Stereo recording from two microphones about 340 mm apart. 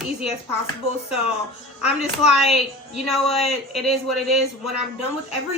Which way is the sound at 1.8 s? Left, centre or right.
Centre.